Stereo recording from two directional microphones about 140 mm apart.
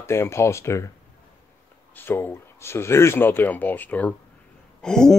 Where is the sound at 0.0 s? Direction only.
20° left (ahead or behind).